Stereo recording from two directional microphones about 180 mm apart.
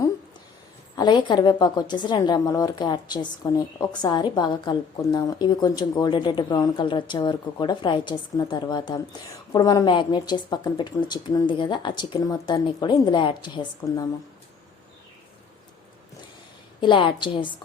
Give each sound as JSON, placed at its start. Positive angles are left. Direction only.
{"t": 0.9, "sound": "speech", "side_deg": 25}
{"t": 16.8, "sound": "speech", "side_deg": 25}